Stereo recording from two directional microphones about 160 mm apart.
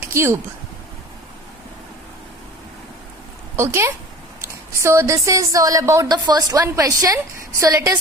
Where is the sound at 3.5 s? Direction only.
15° right (ahead or behind).